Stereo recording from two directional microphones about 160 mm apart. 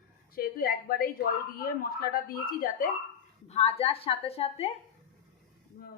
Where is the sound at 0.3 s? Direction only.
65° left (ahead or behind).